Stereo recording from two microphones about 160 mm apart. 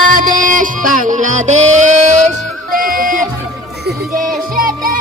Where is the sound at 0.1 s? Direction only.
60° right (ahead or behind).